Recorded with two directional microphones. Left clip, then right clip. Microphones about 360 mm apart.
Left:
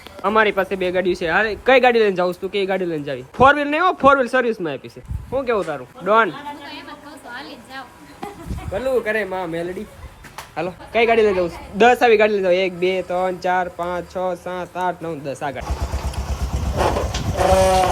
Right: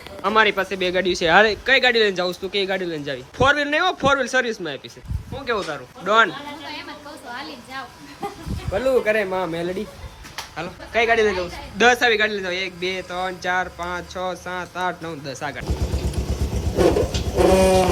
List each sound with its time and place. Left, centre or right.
0.2 s a man's voice: centre
8.7 s a man's voice: centre
17.4 s a man's voice: centre